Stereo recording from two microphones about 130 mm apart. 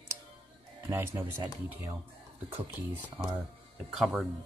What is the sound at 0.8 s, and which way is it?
Speech, 15° right (ahead or behind).